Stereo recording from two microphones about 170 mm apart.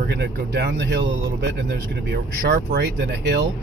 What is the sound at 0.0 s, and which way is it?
Speech, 80° right.